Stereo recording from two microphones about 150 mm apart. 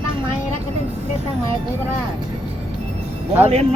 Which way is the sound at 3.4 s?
45° right (ahead or behind).